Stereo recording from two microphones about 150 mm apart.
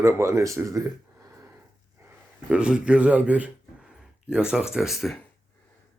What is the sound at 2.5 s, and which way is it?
A man's voice, 5° right (ahead or behind).